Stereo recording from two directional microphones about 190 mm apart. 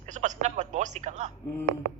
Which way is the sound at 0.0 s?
40° right (ahead or behind).